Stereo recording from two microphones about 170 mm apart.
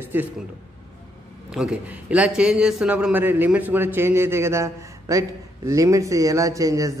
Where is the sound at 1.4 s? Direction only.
5° right (ahead or behind).